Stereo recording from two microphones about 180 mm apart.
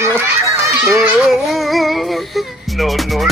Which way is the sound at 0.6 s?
Centre (ahead or behind).